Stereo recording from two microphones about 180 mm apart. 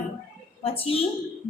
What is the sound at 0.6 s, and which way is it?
Speech, 30° left (ahead or behind).